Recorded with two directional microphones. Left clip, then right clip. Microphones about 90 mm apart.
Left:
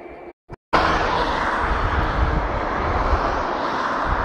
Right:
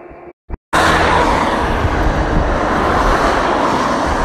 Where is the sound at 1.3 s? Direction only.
30° right (ahead or behind).